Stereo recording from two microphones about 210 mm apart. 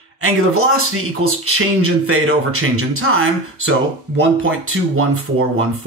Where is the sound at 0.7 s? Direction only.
90° right.